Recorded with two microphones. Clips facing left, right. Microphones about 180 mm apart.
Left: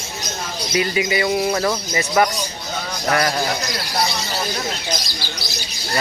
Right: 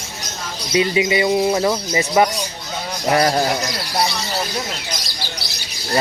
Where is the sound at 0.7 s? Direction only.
20° right (ahead or behind).